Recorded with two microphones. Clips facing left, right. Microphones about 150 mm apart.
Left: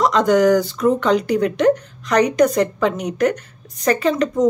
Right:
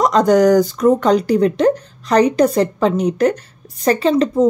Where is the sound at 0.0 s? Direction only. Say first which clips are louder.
Right 2 dB; 40° right (ahead or behind).